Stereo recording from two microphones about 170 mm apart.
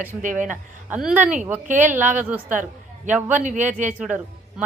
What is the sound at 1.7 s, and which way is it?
Speech, 45° right (ahead or behind).